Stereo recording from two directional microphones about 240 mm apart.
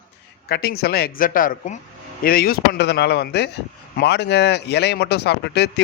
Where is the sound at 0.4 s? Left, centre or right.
Left.